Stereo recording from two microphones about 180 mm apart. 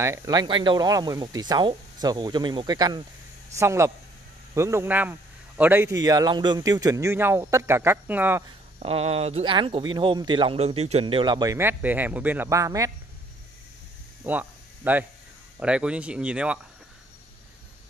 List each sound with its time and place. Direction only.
0.0 s a man's voice: 20° right (ahead or behind)
8.7 s speech: 35° right (ahead or behind); by 12.9 s 15° right (ahead or behind)
14.2 s a man's voice: 10° right (ahead or behind)